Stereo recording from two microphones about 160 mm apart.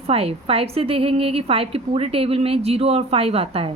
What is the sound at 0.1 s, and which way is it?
Speech, 40° right (ahead or behind).